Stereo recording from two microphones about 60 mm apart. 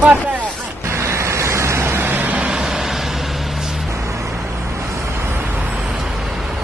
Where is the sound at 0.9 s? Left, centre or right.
Right.